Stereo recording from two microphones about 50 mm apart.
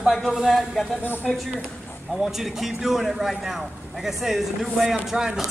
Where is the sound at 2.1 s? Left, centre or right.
Centre.